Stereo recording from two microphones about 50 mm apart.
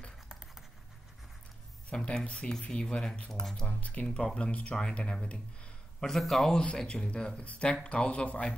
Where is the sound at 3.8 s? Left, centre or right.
Left.